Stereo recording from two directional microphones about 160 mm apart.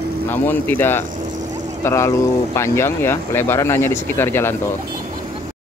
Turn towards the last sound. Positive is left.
turn(degrees=15)  # may be behind; listen again after turning